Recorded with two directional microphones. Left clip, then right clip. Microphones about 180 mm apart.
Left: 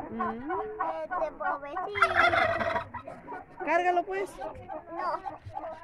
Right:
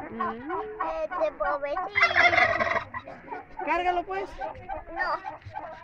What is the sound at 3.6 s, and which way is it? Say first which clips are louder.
Speech: even; 50° left (ahead or behind).